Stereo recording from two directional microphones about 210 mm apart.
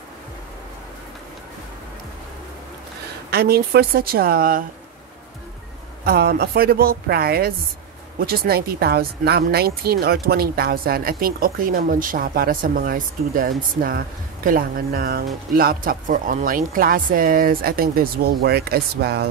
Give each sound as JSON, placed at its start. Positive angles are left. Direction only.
{"t": 3.3, "sound": "speech", "side_deg": -50}
{"t": 6.0, "sound": "speech", "side_deg": -50}